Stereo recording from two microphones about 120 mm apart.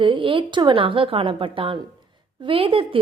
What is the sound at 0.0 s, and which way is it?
A woman's voice, 45° right (ahead or behind).